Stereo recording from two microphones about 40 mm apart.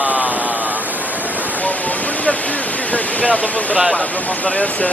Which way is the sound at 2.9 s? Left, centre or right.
Left.